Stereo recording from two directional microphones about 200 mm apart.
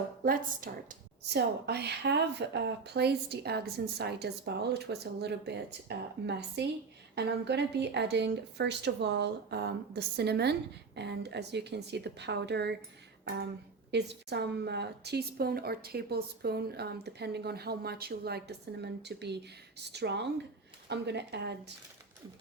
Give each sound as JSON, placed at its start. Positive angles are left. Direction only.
{"t": 0.3, "sound": "a woman's voice", "side_deg": -45}
{"t": 13.2, "sound": "a sound", "side_deg": -50}
{"t": 13.9, "sound": "a woman's voice", "side_deg": -60}